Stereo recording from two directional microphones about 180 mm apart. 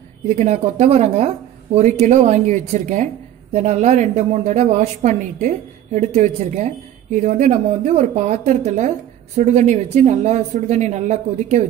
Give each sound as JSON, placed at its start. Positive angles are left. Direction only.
{"t": 0.4, "sound": "speech", "side_deg": -35}